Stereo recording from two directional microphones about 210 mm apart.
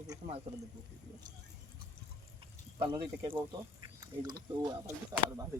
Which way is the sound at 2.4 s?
25° right (ahead or behind).